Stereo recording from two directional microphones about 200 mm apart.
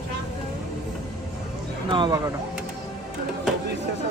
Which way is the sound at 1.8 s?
20° right (ahead or behind).